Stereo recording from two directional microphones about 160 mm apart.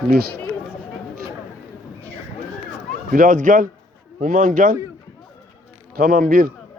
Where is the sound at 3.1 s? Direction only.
60° right (ahead or behind).